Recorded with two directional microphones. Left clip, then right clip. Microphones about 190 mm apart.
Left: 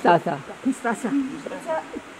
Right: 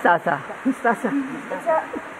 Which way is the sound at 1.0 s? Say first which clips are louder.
Right 2 dB; 30° left (ahead or behind).